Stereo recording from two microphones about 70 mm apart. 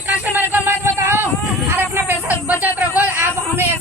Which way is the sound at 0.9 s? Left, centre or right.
Right.